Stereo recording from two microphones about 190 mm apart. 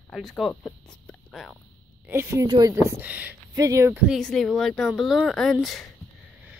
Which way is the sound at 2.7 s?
15° right (ahead or behind).